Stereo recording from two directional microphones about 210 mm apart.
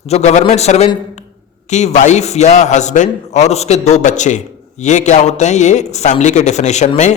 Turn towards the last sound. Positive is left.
turn(degrees=35)  # may be behind; listen again after turning